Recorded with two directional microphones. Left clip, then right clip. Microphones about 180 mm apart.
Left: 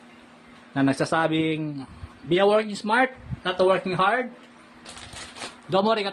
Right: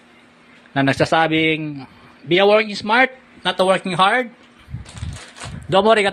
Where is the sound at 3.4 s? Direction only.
45° right (ahead or behind).